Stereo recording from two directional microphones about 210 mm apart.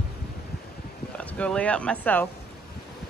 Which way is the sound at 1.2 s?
5° left (ahead or behind).